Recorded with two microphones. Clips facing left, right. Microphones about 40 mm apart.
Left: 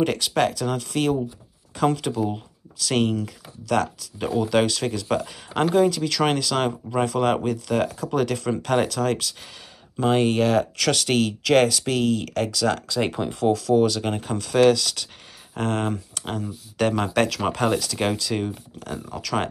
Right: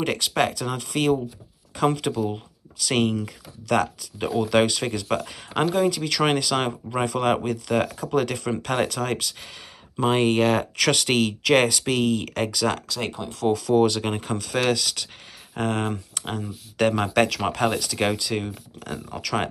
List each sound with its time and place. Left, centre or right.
0.0 s speech: centre
12.8 s speech: centre
13.5 s speech: centre
13.7 s speech: centre